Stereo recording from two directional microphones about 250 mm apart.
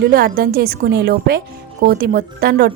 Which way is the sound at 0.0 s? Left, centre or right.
Right.